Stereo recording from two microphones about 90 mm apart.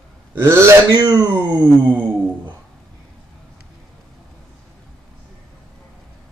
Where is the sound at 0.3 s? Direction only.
30° right (ahead or behind).